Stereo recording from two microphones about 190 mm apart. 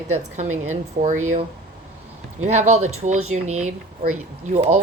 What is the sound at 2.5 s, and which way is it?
Speech, 35° right (ahead or behind).